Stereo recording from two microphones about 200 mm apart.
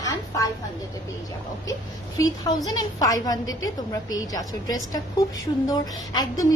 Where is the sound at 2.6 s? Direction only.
20° left (ahead or behind).